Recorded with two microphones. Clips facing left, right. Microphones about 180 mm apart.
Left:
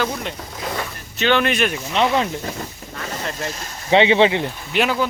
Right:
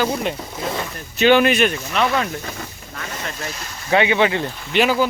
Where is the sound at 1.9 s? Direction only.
25° left (ahead or behind).